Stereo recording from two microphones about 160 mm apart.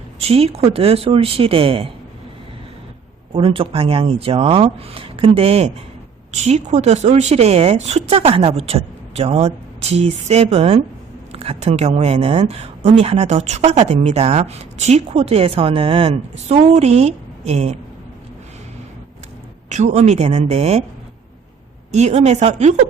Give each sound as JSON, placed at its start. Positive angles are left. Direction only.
{"t": 0.2, "sound": "speech", "side_deg": -40}
{"t": 3.3, "sound": "speech", "side_deg": -35}
{"t": 19.7, "sound": "speech", "side_deg": -45}
{"t": 21.9, "sound": "speech", "side_deg": -45}